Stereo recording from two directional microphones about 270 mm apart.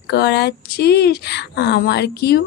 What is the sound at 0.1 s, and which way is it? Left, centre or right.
Speech, left.